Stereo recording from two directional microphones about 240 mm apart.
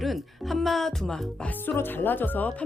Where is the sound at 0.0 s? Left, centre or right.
Centre.